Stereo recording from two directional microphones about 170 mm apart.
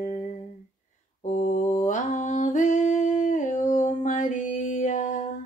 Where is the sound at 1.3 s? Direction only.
45° left (ahead or behind).